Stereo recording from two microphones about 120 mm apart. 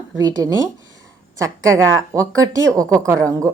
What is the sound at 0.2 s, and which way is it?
A woman's voice, 30° right (ahead or behind).